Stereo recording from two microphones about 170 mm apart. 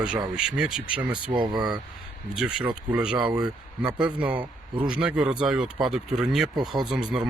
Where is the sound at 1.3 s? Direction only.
25° right (ahead or behind).